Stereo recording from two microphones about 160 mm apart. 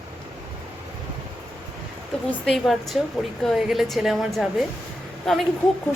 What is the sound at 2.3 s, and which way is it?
A woman's voice, centre (ahead or behind).